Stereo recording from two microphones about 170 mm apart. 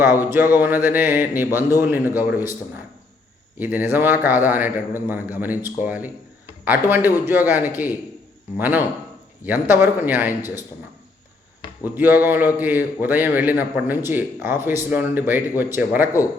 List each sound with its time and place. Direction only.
0.0 s speech: 15° right (ahead or behind)
3.6 s speech: 10° right (ahead or behind)
11.9 s speech: 10° right (ahead or behind)